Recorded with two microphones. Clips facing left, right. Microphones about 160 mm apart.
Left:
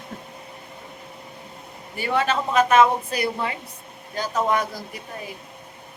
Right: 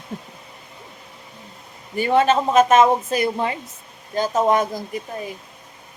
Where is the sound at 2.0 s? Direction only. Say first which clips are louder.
Right 6 dB; 25° right (ahead or behind).